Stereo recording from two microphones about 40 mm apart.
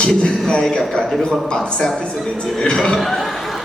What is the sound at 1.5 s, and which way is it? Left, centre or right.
Speech, left.